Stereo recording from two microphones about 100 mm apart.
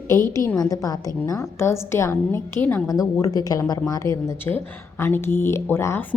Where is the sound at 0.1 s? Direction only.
30° left (ahead or behind).